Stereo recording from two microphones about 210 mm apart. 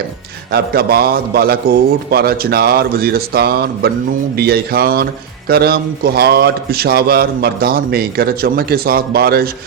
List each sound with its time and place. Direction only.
0.5 s a man's voice: 45° right (ahead or behind)